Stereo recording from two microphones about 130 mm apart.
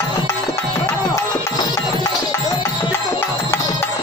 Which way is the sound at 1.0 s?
30° left (ahead or behind).